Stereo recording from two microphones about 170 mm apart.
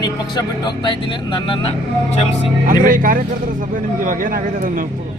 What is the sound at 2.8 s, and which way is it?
A man's voice, 55° right (ahead or behind).